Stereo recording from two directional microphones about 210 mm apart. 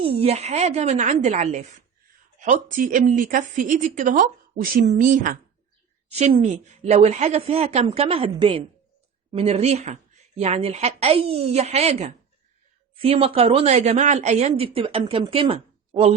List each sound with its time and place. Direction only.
0.0 s a woman's voice: 25° right (ahead or behind)